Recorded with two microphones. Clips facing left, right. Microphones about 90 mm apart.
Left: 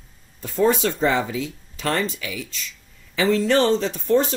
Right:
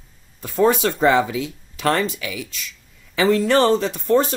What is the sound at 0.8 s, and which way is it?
Speech, 70° right (ahead or behind).